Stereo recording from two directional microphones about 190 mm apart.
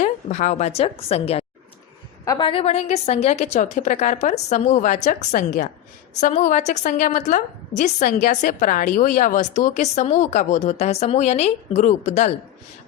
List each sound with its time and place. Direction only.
0.0 s a woman's voice: 40° left (ahead or behind)
2.2 s a woman's voice: 20° left (ahead or behind)
2.5 s a woman's voice: 30° left (ahead or behind)